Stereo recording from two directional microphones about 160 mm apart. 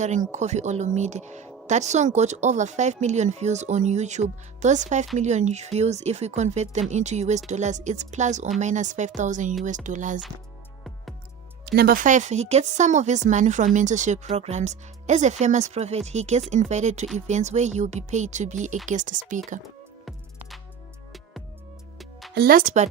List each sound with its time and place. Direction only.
0.0 s speech: 50° right (ahead or behind)
11.6 s speech: 85° right; by 19.2 s 50° right (ahead or behind)
22.4 s speech: 65° right (ahead or behind)